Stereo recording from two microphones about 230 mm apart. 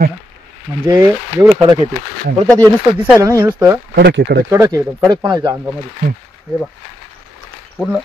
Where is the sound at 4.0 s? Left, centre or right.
Right.